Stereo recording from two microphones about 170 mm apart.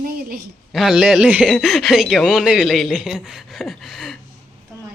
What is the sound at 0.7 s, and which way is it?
Speech, 5° right (ahead or behind).